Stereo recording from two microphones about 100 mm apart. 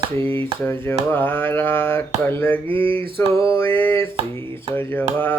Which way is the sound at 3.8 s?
20° left (ahead or behind).